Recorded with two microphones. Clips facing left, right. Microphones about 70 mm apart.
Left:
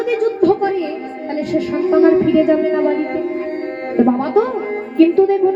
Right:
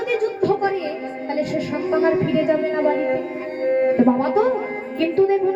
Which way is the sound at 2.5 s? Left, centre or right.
Centre.